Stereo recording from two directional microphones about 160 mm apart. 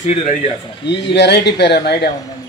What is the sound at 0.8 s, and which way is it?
Speech, 90° left.